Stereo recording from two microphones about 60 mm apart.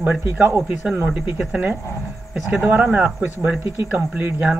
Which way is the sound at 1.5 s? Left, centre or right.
Right.